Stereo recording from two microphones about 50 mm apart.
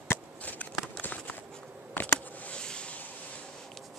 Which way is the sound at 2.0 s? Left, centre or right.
Left.